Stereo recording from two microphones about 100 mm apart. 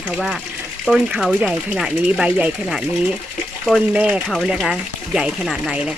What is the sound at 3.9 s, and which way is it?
Speech, 15° right (ahead or behind).